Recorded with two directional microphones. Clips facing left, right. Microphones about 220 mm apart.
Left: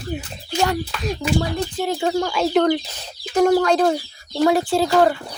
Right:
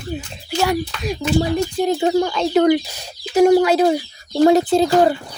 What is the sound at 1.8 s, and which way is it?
Speech, 20° right (ahead or behind).